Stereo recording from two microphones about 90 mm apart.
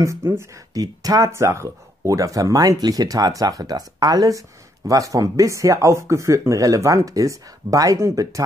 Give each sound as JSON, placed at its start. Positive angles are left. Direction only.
{"t": 0.0, "sound": "speech", "side_deg": -30}
{"t": 0.7, "sound": "speech", "side_deg": -40}